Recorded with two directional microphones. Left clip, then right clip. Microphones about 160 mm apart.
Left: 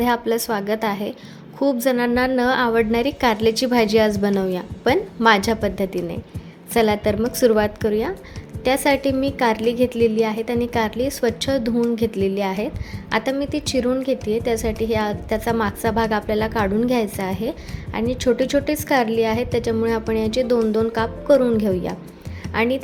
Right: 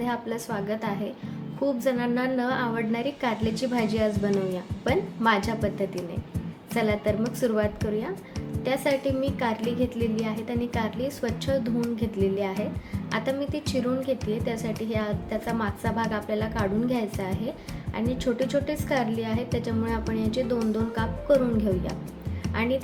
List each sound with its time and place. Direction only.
0.0 s a woman's voice: 60° left (ahead or behind)